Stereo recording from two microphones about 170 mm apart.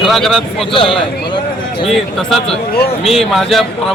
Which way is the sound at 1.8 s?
Centre (ahead or behind).